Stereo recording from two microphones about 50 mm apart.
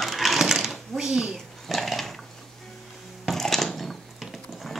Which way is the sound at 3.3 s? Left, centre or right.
Centre.